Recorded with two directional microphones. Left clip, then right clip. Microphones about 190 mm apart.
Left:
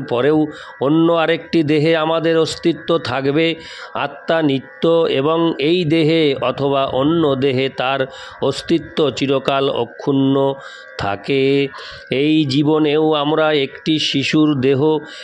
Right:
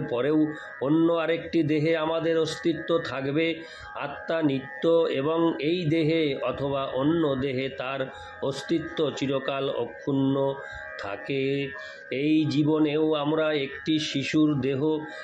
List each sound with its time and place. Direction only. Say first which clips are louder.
0.0 s speech: left 9 dB; 60° left (ahead or behind)